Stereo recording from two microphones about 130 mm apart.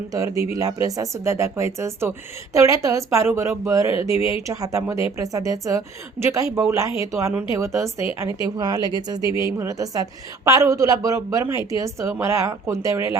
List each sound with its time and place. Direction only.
0.5 s speech: 25° right (ahead or behind)
4.1 s speech: 50° left (ahead or behind)
4.4 s speech: 25° right (ahead or behind)